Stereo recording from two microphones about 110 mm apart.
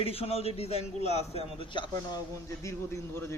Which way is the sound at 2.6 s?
25° left (ahead or behind).